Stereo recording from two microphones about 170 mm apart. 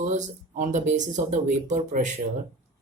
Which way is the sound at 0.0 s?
45° right (ahead or behind).